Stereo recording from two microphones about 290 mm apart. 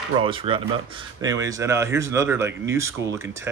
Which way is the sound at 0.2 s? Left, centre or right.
Centre.